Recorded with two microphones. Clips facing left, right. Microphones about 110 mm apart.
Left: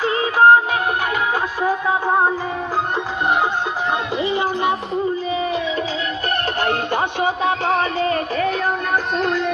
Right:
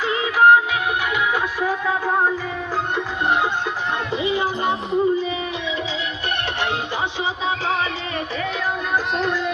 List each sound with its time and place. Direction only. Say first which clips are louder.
0.0 s music: left 2 dB; 40° left (ahead or behind)
1.6 s music: left 5 dB; 30° left (ahead or behind)
6.6 s music: left 4 dB; 55° left (ahead or behind)